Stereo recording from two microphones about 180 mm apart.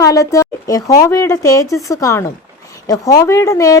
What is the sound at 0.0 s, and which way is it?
A woman's voice, 20° left (ahead or behind).